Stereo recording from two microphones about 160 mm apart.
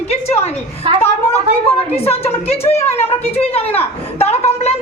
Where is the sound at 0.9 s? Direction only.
35° right (ahead or behind).